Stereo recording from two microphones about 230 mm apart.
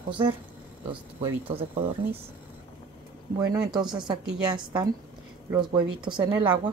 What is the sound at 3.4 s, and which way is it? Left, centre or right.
Speech, centre.